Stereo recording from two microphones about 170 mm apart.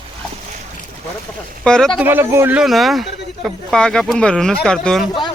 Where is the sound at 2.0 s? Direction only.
10° right (ahead or behind); by 5.1 s 5° left (ahead or behind).